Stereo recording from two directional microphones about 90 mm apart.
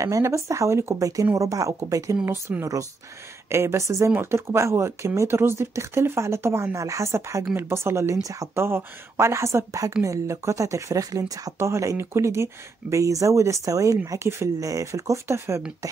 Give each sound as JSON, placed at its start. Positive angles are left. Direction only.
{"t": 0.0, "sound": "speech", "side_deg": -35}
{"t": 8.5, "sound": "a woman's voice", "side_deg": -25}